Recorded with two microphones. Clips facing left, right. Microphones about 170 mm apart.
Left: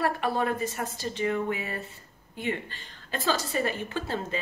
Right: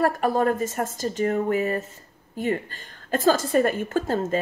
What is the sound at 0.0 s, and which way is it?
A woman's voice, 45° right (ahead or behind).